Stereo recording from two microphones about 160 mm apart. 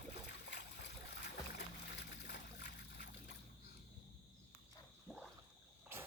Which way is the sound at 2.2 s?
90° left.